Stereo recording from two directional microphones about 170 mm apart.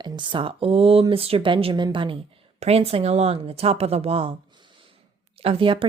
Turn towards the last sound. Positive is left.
turn(degrees=-30)  # may be behind; listen again after turning